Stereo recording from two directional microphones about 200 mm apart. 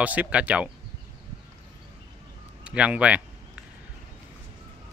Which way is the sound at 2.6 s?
5° right (ahead or behind).